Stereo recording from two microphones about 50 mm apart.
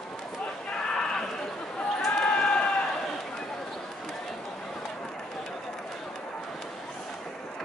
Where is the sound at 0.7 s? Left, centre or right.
Centre.